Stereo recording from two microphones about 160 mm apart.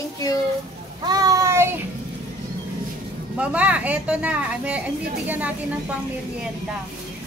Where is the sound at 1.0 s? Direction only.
25° right (ahead or behind).